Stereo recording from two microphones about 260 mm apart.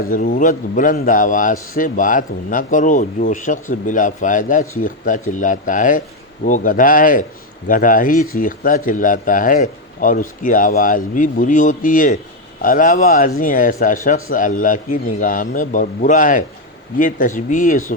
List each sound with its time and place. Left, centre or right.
0.0 s speech: left